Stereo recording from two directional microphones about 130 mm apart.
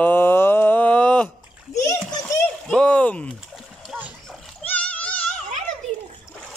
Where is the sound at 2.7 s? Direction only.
10° left (ahead or behind).